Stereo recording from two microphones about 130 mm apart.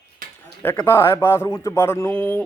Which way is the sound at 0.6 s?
15° left (ahead or behind).